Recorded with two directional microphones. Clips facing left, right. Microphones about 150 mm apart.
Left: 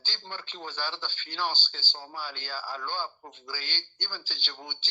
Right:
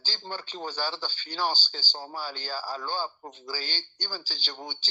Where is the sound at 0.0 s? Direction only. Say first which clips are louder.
Right 4 dB; 40° right (ahead or behind).